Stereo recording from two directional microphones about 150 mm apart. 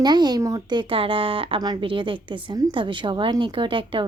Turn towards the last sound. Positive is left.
turn(degrees=-35)  # may be behind; listen again after turning